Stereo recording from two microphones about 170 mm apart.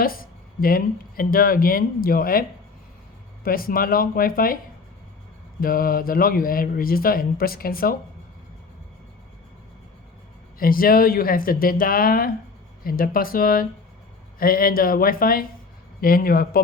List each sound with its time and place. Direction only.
0.0 s speech: 60° left (ahead or behind)
3.4 s speech: 60° left (ahead or behind)
5.5 s speech: 60° left (ahead or behind)
10.6 s speech: 60° left (ahead or behind)